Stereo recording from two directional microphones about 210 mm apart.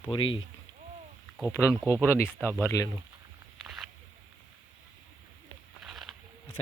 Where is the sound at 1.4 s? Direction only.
15° left (ahead or behind).